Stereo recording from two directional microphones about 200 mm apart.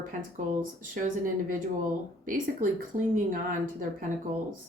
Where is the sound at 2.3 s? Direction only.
40° right (ahead or behind).